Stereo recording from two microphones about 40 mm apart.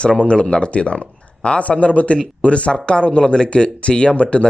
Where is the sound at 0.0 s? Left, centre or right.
Left.